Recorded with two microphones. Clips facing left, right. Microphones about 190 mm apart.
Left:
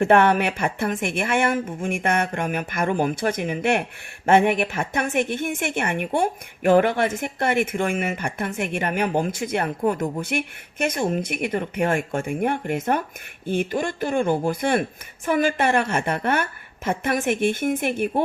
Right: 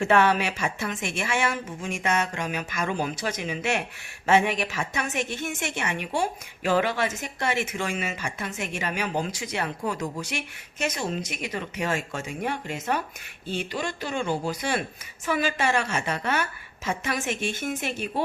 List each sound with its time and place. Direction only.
0.0 s a woman's voice: 55° left (ahead or behind)